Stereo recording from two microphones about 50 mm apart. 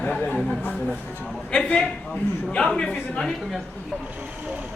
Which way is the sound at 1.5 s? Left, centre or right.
Centre.